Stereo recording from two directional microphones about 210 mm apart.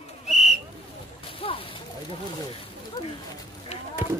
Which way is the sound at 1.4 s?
25° left (ahead or behind).